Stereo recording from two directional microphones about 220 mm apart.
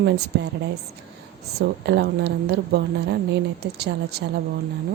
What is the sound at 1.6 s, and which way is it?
A woman's voice, 50° right (ahead or behind).